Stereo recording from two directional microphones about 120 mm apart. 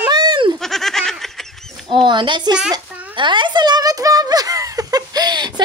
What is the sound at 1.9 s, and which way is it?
Speech, 40° right (ahead or behind).